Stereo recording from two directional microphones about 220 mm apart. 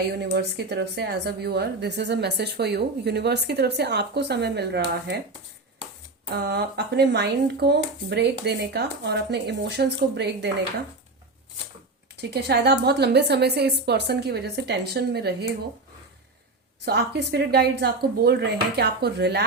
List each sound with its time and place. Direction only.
0.1 s a woman's voice: 50° right (ahead or behind)
6.3 s a woman's voice: 45° right (ahead or behind)
12.3 s a woman's voice: 50° right (ahead or behind)
16.8 s a woman's voice: 50° right (ahead or behind)